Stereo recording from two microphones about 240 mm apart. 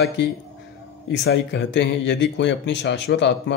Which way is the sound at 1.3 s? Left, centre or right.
Left.